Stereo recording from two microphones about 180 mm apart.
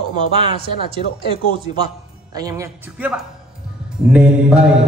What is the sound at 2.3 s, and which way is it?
Speech, 20° right (ahead or behind).